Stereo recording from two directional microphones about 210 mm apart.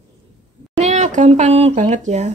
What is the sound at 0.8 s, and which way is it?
Speech, 35° right (ahead or behind).